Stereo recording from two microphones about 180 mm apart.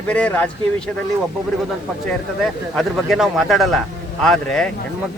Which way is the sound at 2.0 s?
Centre (ahead or behind).